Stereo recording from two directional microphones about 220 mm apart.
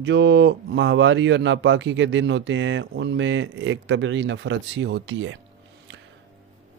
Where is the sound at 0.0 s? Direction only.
55° right (ahead or behind).